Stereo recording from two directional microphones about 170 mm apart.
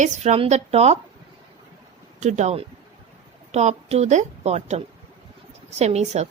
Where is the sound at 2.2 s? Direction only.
45° right (ahead or behind).